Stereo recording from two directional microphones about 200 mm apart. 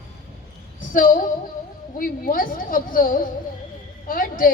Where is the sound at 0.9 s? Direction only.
45° left (ahead or behind).